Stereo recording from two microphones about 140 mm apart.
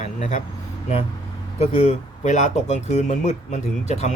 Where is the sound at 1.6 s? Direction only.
55° left (ahead or behind).